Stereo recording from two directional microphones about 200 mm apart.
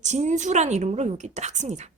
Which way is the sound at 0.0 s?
35° right (ahead or behind).